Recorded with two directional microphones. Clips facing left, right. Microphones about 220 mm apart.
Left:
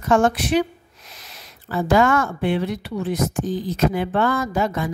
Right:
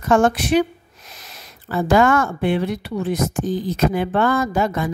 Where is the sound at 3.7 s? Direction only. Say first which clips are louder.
Right 1 dB; 50° right (ahead or behind).